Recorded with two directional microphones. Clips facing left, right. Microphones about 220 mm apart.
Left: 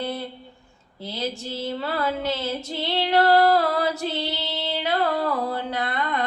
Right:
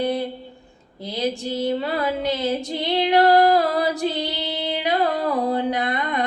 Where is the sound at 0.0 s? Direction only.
15° right (ahead or behind).